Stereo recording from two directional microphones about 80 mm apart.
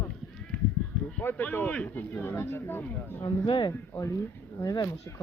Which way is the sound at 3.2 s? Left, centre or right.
Left.